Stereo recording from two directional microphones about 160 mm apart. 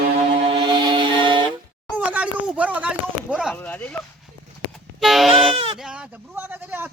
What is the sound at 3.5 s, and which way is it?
Speech, 10° left (ahead or behind).